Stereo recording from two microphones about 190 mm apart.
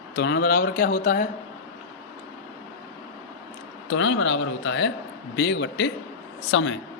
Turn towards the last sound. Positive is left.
turn(degrees=90)